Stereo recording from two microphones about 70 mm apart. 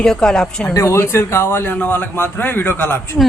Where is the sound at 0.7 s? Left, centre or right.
Left.